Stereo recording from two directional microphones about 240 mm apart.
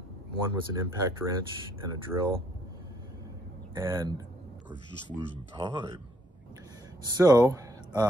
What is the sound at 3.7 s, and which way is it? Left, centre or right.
Speech, centre.